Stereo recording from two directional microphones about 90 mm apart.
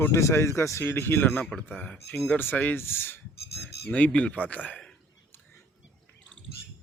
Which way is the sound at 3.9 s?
15° left (ahead or behind).